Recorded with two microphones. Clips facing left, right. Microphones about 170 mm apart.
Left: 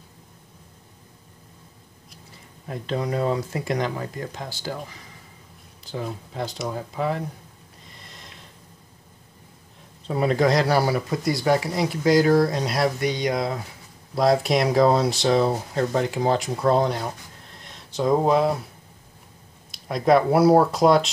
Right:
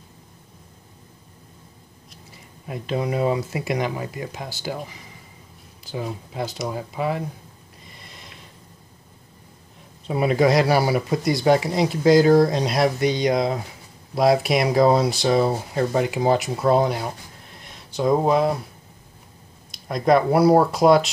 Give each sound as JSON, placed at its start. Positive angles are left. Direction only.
{"t": 2.7, "sound": "speech", "side_deg": -10}
{"t": 7.9, "sound": "snort", "side_deg": -5}
{"t": 10.0, "sound": "speech", "side_deg": -10}
{"t": 14.1, "sound": "speech", "side_deg": -10}
{"t": 19.7, "sound": "speech", "side_deg": 0}